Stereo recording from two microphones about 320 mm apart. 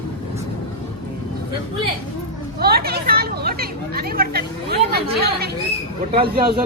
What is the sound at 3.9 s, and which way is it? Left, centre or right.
Chatter, right.